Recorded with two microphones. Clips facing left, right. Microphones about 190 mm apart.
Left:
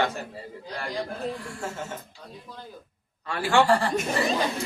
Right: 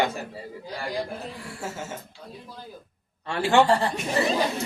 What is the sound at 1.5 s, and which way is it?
Speech, 5° right (ahead or behind).